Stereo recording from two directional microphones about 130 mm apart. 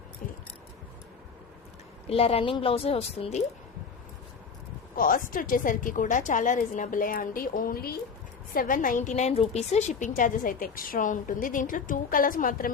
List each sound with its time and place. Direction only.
2.0 s a woman's voice: 50° left (ahead or behind)
4.9 s a woman's voice: 90° left